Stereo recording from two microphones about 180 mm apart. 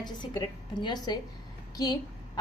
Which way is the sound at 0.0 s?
25° left (ahead or behind).